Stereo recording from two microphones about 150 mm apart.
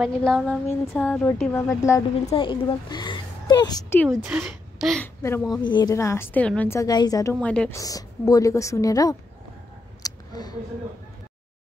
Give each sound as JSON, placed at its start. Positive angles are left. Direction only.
{"t": 0.0, "sound": "a woman's voice", "side_deg": 5}
{"t": 1.9, "sound": "a woman's voice", "side_deg": 20}
{"t": 2.2, "sound": "a woman's voice", "side_deg": 35}
{"t": 4.1, "sound": "a woman's voice", "side_deg": -10}
{"t": 5.0, "sound": "a woman's voice", "side_deg": 15}
{"t": 5.6, "sound": "a woman's voice", "side_deg": 30}
{"t": 5.9, "sound": "a woman's voice", "side_deg": 20}
{"t": 6.8, "sound": "a woman's voice", "side_deg": 25}
{"t": 7.3, "sound": "a woman's voice", "side_deg": 5}
{"t": 7.7, "sound": "a woman's voice", "side_deg": 25}
{"t": 10.0, "sound": "a sound", "side_deg": 25}